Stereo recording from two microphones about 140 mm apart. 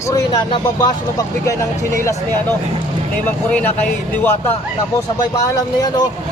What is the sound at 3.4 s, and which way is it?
Speech, 10° left (ahead or behind).